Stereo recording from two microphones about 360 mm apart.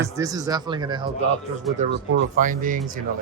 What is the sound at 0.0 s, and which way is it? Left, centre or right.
Speech, centre.